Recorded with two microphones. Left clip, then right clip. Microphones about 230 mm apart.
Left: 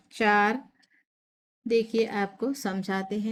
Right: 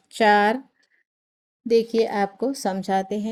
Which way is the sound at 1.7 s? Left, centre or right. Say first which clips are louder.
Right 5 dB; centre.